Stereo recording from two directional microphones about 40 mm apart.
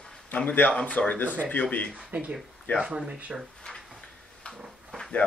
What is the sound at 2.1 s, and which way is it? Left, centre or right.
Speech, right.